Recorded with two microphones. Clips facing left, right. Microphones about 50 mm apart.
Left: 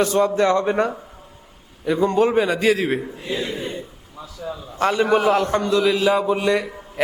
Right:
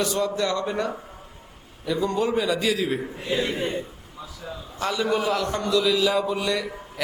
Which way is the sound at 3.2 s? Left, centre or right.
Right.